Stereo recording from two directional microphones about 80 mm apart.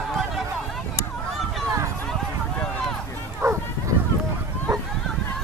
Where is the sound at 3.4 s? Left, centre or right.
Right.